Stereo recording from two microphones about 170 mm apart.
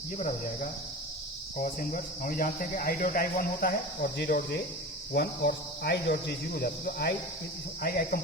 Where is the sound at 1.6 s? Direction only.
55° left (ahead or behind).